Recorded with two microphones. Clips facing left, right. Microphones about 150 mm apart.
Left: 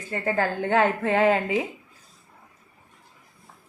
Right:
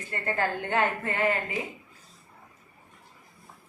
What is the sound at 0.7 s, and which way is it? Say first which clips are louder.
Speech: left 9 dB; 90° left.